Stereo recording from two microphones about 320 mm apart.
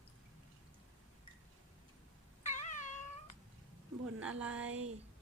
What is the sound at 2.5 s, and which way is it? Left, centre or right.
Cat, left.